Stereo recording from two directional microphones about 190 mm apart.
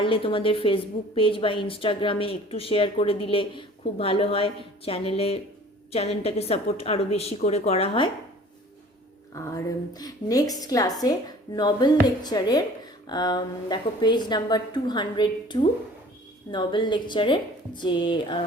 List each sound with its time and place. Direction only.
0.0 s a woman's voice: 25° left (ahead or behind)
9.3 s a woman's voice: 15° left (ahead or behind)